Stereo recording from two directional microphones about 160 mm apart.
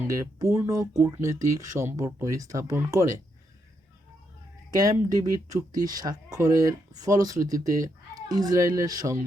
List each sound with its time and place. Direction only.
0.0 s speech: 20° right (ahead or behind)
4.8 s speech: 20° right (ahead or behind)